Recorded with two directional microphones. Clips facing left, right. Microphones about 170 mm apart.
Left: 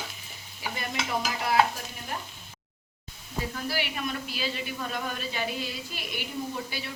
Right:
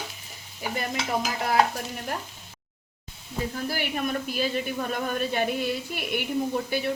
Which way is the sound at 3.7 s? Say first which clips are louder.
Right 4 dB; 50° right (ahead or behind).